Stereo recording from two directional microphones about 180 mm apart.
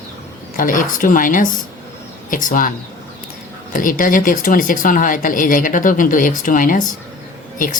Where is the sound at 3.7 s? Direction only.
50° left (ahead or behind).